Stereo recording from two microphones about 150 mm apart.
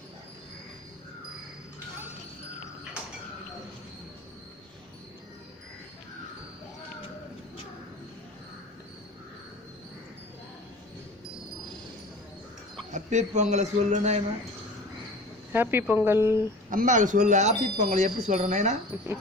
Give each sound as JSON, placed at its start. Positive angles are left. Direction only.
{"t": 12.9, "sound": "speech", "side_deg": -50}
{"t": 15.5, "sound": "speech", "side_deg": -15}
{"t": 16.6, "sound": "speech", "side_deg": -55}